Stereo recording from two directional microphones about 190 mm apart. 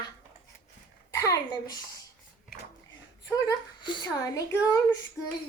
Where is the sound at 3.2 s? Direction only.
20° left (ahead or behind).